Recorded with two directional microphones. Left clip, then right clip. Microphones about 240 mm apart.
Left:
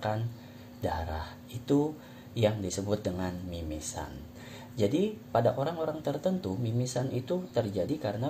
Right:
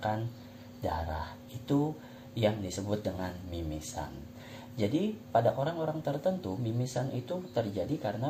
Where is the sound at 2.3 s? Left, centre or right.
Left.